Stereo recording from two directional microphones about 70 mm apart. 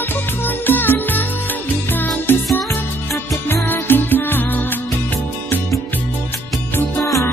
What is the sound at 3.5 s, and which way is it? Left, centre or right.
Music, left.